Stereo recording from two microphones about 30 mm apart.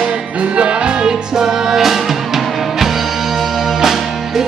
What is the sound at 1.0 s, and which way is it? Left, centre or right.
Music, centre.